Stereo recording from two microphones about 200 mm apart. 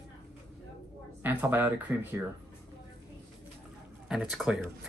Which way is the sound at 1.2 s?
10° right (ahead or behind).